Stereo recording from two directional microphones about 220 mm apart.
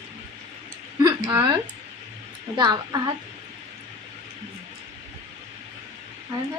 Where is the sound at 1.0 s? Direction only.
20° right (ahead or behind).